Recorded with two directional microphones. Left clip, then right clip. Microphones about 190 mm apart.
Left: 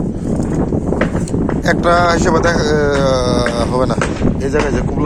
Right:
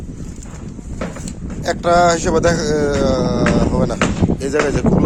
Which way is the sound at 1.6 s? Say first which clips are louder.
Even; 10° right (ahead or behind).